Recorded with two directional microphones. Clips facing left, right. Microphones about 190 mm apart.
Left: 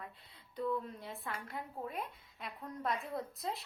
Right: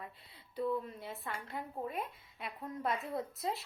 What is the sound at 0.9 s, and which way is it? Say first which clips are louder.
A woman's voice: right 1 dB; centre (ahead or behind).